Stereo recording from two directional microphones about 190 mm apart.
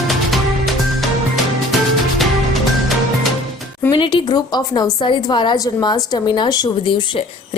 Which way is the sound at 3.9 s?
25° left (ahead or behind).